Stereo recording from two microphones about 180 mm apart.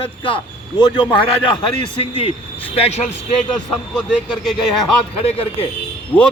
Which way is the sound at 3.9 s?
Centre (ahead or behind).